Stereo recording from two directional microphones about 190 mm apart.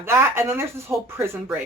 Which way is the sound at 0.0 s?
15° right (ahead or behind).